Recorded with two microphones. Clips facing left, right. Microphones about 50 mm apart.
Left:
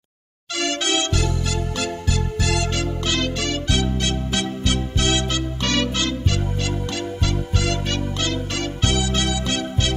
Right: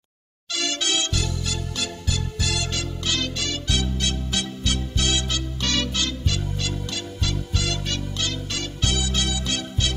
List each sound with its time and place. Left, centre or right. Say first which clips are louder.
0.6 s music: left 4 dB; left